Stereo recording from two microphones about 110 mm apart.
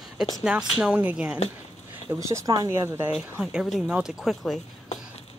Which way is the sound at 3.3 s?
5° right (ahead or behind).